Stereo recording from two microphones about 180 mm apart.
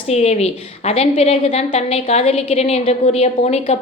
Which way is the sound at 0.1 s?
35° left (ahead or behind).